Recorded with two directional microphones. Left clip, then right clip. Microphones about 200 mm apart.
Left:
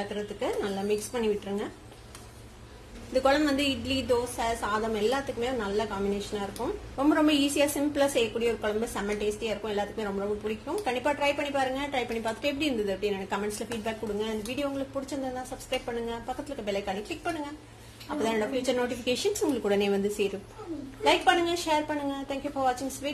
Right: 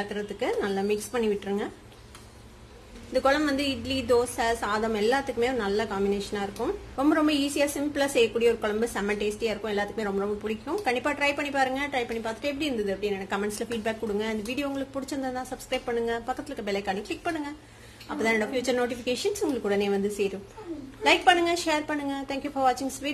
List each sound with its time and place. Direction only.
0.1 s a woman's voice: 20° right (ahead or behind)
3.1 s speech: 15° right (ahead or behind)
4.1 s a woman's voice: 25° right (ahead or behind)
7.2 s a woman's voice: 5° right (ahead or behind)
13.4 s a woman's voice: 25° right (ahead or behind)
18.9 s speech: 10° right (ahead or behind)
21.0 s a woman's voice: 25° right (ahead or behind)